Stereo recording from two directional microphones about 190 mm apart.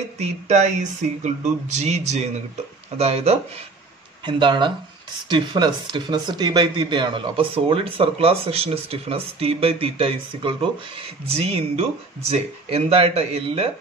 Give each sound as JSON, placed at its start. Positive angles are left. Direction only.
{"t": 0.2, "sound": "speech", "side_deg": -40}